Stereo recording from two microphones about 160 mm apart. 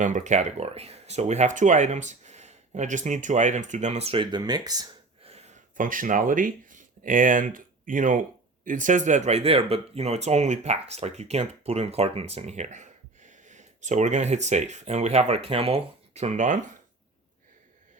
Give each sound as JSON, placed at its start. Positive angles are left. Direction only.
{"t": 0.0, "sound": "speech", "side_deg": -50}
{"t": 5.2, "sound": "a sound", "side_deg": -40}
{"t": 5.7, "sound": "speech", "side_deg": -55}